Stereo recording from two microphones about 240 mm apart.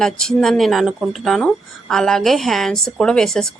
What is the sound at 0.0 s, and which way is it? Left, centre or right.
Speech, centre.